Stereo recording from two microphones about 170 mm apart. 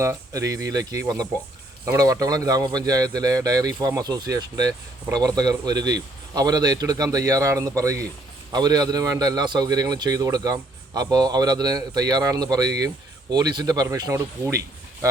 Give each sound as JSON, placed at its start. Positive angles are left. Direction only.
{"t": 0.0, "sound": "a man's voice", "side_deg": -20}